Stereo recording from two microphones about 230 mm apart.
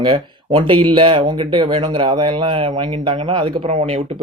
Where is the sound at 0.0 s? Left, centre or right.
Right.